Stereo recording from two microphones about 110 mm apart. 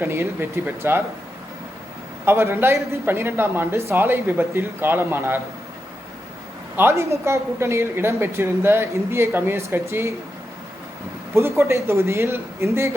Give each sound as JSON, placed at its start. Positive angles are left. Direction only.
{"t": 0.0, "sound": "a woman's voice", "side_deg": -20}
{"t": 2.2, "sound": "a woman's voice", "side_deg": -20}
{"t": 6.7, "sound": "a woman's voice", "side_deg": -25}
{"t": 11.3, "sound": "a woman's voice", "side_deg": -25}